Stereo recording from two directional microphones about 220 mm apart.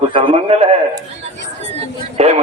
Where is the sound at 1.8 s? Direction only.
30° right (ahead or behind).